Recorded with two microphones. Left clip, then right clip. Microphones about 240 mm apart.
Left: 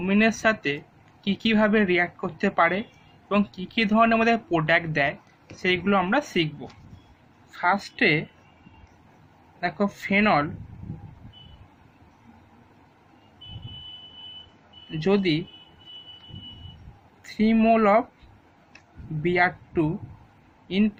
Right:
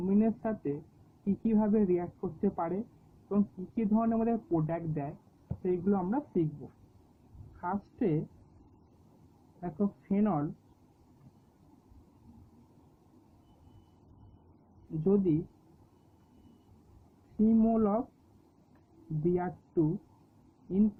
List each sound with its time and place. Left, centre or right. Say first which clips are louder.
0.1 s speech: left 12 dB; centre
7.6 s speech: left 12 dB; centre
9.6 s speech: left 10 dB; centre
15.1 s speech: left 6 dB; centre
17.4 s speech: left 9 dB; centre
19.2 s speech: left 11 dB; centre